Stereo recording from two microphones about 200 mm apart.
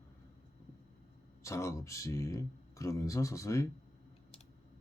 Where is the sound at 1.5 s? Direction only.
15° left (ahead or behind).